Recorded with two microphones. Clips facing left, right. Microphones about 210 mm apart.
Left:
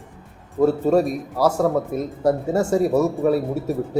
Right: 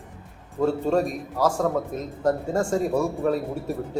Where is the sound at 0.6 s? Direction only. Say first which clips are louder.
Left 5 dB; 10° left (ahead or behind).